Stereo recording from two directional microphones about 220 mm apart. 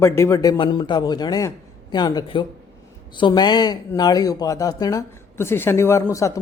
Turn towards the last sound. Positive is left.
turn(degrees=15)  # may be behind; listen again after turning